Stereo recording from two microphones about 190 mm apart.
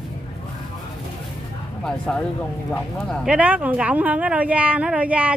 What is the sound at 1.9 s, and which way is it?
Speech, 5° left (ahead or behind).